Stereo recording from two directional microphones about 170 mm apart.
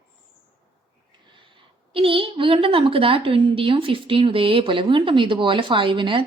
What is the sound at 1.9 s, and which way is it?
A woman's voice, 30° right (ahead or behind).